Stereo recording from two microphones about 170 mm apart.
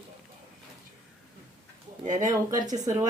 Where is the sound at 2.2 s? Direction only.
20° right (ahead or behind).